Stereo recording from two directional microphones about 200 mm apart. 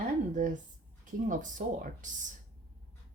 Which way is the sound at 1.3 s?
40° right (ahead or behind).